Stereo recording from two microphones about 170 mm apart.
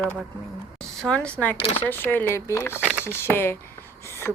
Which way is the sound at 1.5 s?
35° left (ahead or behind).